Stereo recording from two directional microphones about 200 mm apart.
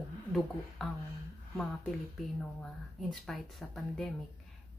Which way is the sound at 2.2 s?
Centre (ahead or behind).